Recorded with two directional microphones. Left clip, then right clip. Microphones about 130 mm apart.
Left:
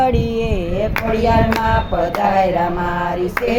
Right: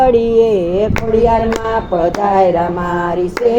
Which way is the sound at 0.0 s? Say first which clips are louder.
Right 8 dB; 25° right (ahead or behind).